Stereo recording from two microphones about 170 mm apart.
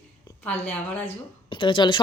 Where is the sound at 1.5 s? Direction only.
30° left (ahead or behind).